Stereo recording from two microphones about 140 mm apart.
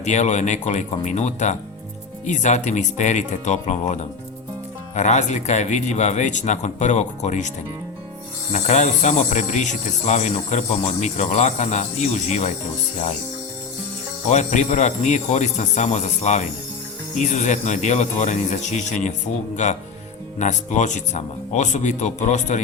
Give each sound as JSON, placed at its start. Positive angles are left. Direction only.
{"t": 0.0, "sound": "speech", "side_deg": 55}
{"t": 8.5, "sound": "speech", "side_deg": 55}
{"t": 14.3, "sound": "speech", "side_deg": 55}
{"t": 20.4, "sound": "speech", "side_deg": 60}